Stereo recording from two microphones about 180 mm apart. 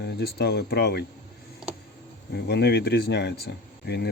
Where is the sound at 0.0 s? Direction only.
65° left (ahead or behind).